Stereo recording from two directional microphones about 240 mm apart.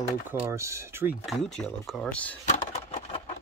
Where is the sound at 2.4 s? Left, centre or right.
Left.